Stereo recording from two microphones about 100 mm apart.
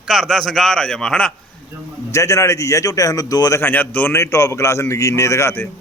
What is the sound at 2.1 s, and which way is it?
A man's voice, 30° left (ahead or behind).